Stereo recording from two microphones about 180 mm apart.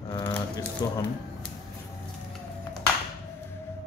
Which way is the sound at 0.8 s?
20° left (ahead or behind).